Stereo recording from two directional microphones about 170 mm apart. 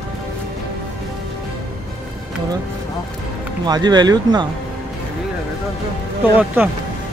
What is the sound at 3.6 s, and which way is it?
Speech, 25° right (ahead or behind).